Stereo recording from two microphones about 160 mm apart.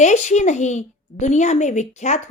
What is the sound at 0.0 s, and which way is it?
A woman's voice, 45° left (ahead or behind).